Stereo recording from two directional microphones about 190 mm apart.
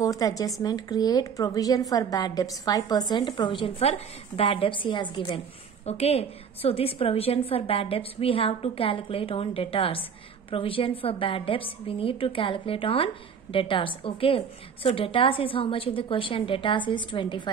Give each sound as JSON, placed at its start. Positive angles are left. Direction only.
{"t": 0.0, "sound": "a woman's voice", "side_deg": 20}